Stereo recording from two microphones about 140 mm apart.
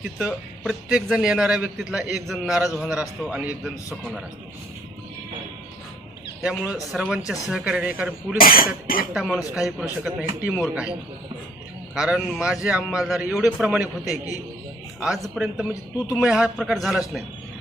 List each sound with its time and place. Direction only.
0.2 s a man's voice: 10° right (ahead or behind)
6.4 s a man's voice: 5° right (ahead or behind)
8.4 s speech: 90° left
9.1 s a man's voice: centre (ahead or behind)
11.9 s a man's voice: 5° right (ahead or behind)